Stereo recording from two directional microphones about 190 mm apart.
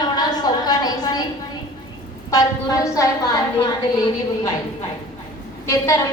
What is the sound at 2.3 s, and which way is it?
A woman's voice, 20° left (ahead or behind).